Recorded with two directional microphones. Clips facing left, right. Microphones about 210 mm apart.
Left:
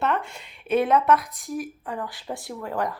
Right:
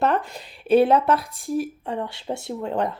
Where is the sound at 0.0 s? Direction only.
35° right (ahead or behind).